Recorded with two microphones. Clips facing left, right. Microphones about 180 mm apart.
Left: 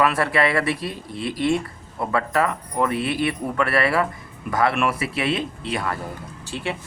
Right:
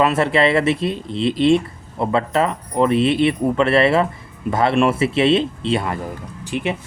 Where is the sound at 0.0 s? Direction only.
25° right (ahead or behind).